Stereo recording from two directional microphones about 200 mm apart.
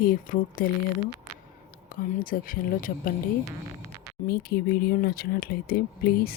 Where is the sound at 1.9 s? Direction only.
45° left (ahead or behind).